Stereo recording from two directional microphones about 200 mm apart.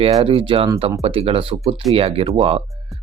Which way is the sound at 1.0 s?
30° right (ahead or behind).